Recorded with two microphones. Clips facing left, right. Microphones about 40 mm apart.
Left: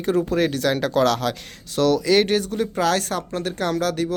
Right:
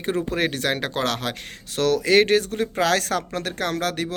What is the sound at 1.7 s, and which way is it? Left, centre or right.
Speech, right.